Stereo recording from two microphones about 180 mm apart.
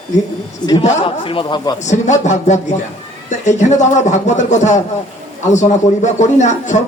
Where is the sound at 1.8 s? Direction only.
40° left (ahead or behind).